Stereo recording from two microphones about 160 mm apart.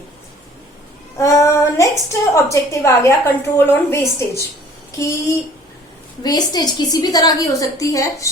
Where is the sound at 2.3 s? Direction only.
20° left (ahead or behind).